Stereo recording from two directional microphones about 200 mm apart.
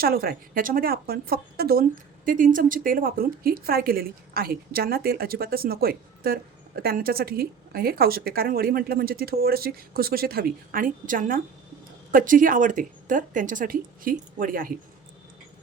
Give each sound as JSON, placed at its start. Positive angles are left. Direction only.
{"t": 0.0, "sound": "a woman's voice", "side_deg": -50}